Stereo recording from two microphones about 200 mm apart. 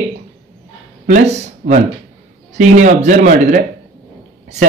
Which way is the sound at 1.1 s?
40° right (ahead or behind).